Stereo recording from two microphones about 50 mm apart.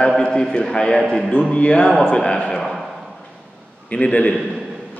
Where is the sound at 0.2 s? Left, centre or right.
Centre.